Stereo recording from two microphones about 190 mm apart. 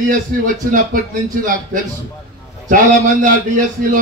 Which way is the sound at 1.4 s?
45° right (ahead or behind).